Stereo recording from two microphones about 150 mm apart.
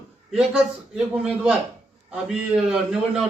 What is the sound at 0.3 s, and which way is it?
A man's voice, 5° right (ahead or behind).